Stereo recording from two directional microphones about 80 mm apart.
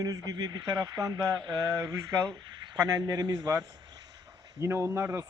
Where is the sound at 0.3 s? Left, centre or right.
Right.